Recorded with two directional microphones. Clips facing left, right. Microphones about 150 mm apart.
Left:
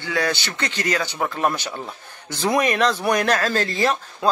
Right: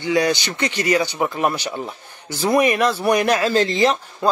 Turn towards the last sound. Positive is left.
turn(degrees=-20)  # may be behind; listen again after turning